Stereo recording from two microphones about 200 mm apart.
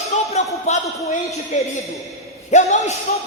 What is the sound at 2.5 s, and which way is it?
Speech, 35° left (ahead or behind).